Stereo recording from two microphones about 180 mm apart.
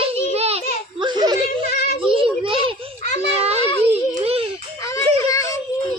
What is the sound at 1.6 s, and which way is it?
Child singing, 60° left (ahead or behind).